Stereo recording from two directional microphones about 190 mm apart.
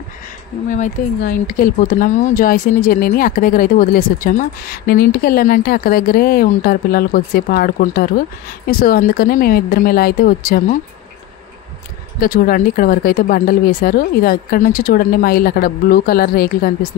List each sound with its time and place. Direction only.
0.7 s speech: 45° left (ahead or behind)
12.2 s speech: 50° left (ahead or behind)